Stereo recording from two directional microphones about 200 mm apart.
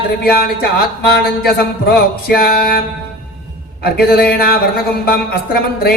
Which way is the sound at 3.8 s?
50° left (ahead or behind).